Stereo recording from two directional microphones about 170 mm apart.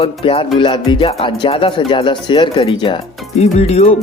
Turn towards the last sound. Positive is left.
turn(degrees=40)  # may be behind; listen again after turning